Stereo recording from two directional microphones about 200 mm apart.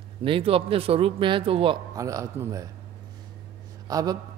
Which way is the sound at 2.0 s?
15° right (ahead or behind).